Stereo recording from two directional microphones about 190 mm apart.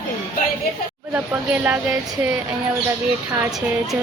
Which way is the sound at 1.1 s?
10° right (ahead or behind).